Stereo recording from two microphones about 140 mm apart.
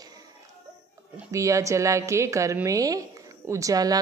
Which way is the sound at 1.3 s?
20° right (ahead or behind).